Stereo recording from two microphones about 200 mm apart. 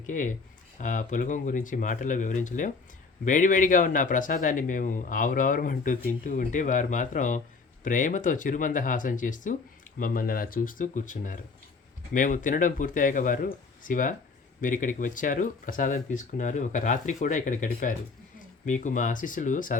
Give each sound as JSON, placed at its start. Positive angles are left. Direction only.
{"t": 0.1, "sound": "speech", "side_deg": 40}